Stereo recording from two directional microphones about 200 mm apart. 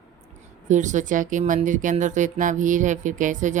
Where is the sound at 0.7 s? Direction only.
40° right (ahead or behind).